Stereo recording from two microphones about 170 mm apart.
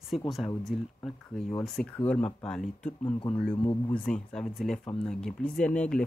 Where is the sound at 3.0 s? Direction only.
30° left (ahead or behind).